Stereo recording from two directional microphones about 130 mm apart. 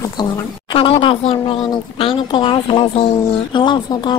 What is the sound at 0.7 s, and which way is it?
Speech, 45° left (ahead or behind).